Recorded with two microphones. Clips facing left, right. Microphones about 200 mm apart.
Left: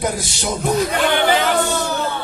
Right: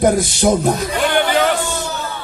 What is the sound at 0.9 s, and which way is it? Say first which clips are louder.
Speech: even; 55° left (ahead or behind).